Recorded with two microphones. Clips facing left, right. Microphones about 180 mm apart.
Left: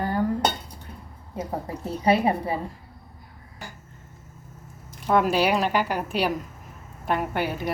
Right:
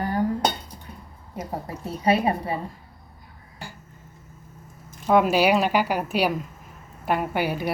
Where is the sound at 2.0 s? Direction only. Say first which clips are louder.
Even; 25° left (ahead or behind).